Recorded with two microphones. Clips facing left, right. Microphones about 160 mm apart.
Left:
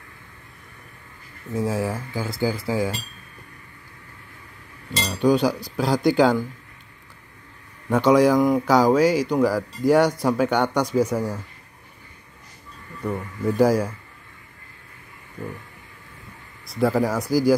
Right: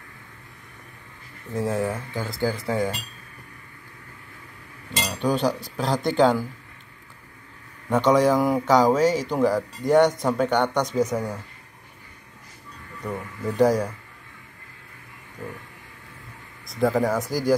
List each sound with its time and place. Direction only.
1.5 s speech: centre (ahead or behind)
5.2 s speech: centre (ahead or behind)
7.9 s speech: centre (ahead or behind)
13.6 s speech: 5° left (ahead or behind)
16.6 s speech: centre (ahead or behind)